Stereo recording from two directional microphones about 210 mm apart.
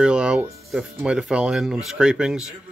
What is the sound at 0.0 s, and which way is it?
Speech, 5° right (ahead or behind).